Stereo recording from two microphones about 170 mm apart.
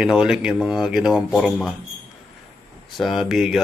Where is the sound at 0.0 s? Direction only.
5° right (ahead or behind).